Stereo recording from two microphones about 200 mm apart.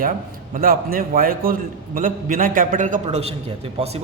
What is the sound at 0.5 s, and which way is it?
A man's voice, 45° right (ahead or behind).